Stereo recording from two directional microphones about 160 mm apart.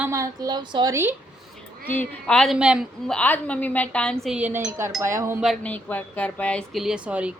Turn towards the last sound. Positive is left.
turn(degrees=-10)  # may be behind; listen again after turning